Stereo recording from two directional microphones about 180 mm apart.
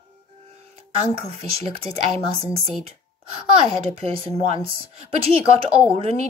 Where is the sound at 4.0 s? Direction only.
30° right (ahead or behind).